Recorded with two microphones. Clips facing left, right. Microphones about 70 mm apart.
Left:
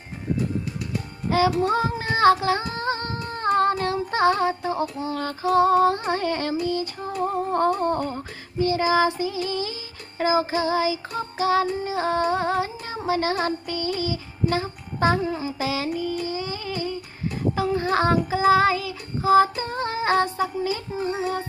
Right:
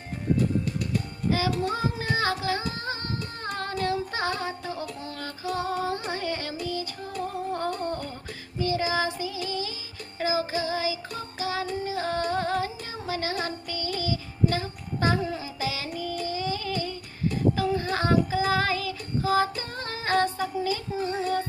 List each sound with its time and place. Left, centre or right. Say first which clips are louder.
1.6 s female singing: left 6 dB; left
4.8 s child singing: left 7 dB; centre
5.2 s music: left 11 dB; left
6.6 s music: left 6 dB; left
11.8 s music: left 5 dB; left
13.0 s music: left 7 dB; left
13.7 s music: left 4 dB; left
15.2 s music: left 5 dB; centre
15.6 s carnatic music: left 5 dB; left
16.0 s child singing: left 3 dB; left
18.3 s female singing: left 7 dB; left
21.0 s child singing: left 4 dB; centre